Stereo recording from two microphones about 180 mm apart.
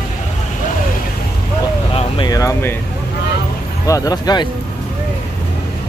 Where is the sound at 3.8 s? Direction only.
20° left (ahead or behind).